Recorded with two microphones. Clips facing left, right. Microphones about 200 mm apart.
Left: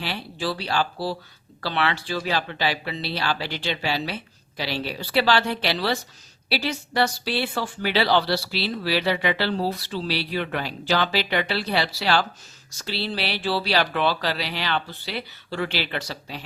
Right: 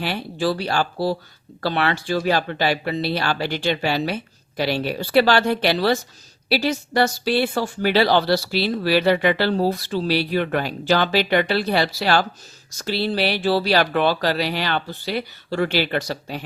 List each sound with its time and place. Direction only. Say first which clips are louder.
0.0 s speech: right 6 dB; 50° right (ahead or behind)